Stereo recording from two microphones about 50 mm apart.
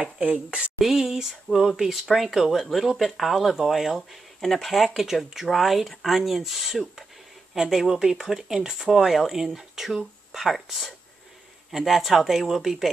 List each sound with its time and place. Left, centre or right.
0.0 s speech: right
0.7 s speech: centre